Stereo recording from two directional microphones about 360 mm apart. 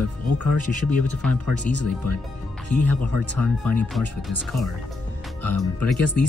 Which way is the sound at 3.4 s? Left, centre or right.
Centre.